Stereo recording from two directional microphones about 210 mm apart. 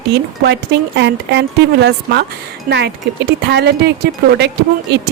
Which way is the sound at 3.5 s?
55° right (ahead or behind).